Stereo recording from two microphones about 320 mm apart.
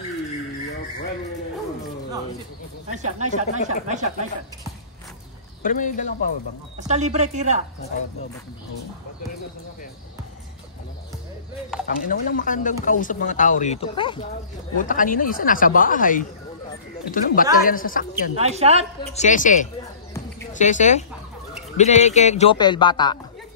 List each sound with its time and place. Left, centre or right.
2.9 s speech: right
5.6 s speech: left
6.9 s speech: right
12.1 s speech: left
18.4 s speech: centre
19.1 s speech: left